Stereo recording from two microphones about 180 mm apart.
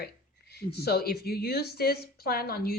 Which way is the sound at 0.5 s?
60° left (ahead or behind).